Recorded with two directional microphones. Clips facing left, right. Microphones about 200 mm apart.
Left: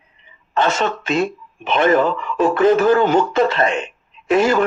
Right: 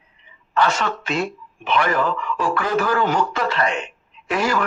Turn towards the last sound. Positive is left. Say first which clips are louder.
# left 6 dB
turn(degrees=25)  # may be behind; listen again after turning